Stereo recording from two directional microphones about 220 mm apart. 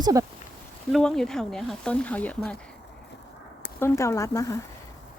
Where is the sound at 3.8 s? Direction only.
15° left (ahead or behind).